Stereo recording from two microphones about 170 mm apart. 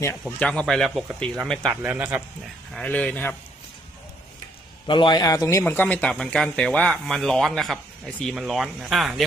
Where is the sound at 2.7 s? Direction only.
5° left (ahead or behind).